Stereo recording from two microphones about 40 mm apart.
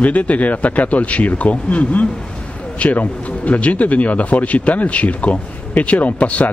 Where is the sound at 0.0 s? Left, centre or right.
Left.